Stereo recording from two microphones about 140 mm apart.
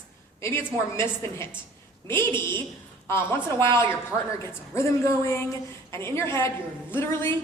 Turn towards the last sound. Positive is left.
turn(degrees=15)  # may be behind; listen again after turning